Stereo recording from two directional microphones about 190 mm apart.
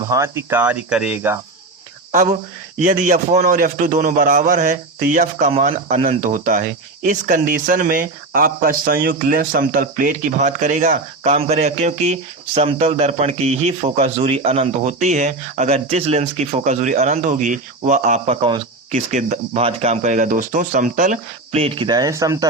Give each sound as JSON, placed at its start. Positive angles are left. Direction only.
{"t": 0.0, "sound": "speech", "side_deg": -15}
{"t": 2.1, "sound": "a man's voice", "side_deg": -40}